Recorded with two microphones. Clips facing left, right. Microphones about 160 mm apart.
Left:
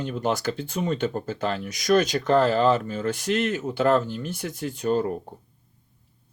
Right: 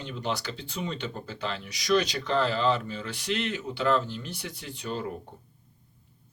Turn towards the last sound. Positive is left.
turn(degrees=45)  # may be behind; listen again after turning